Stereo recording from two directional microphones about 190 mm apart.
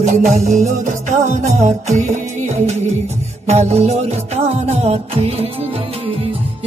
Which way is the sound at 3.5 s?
35° right (ahead or behind).